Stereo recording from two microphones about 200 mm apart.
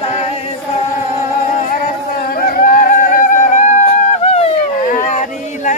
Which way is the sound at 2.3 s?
45° left (ahead or behind).